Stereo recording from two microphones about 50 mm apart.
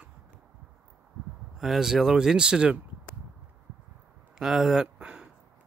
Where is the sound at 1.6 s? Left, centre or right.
Centre.